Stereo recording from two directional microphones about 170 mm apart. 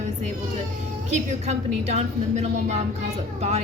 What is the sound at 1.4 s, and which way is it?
A woman's voice, 40° right (ahead or behind).